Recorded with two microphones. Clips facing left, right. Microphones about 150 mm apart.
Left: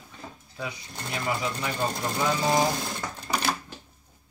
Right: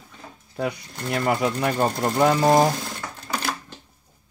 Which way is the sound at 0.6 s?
55° right (ahead or behind).